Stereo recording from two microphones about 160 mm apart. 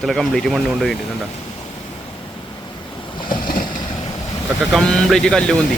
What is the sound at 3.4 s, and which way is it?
Boat, 60° left (ahead or behind).